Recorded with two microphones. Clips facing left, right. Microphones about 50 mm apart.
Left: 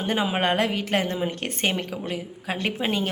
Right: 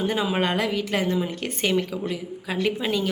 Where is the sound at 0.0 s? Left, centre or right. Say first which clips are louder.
Even; left.